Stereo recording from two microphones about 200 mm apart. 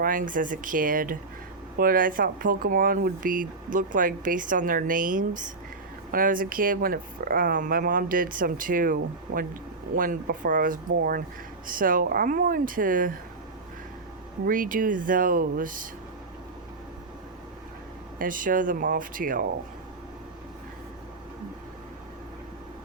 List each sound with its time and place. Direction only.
0.0 s speech: 45° right (ahead or behind)
14.4 s speech: 45° right (ahead or behind)
18.2 s speech: 40° right (ahead or behind)